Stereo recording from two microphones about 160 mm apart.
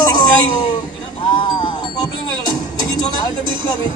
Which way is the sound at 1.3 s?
25° left (ahead or behind).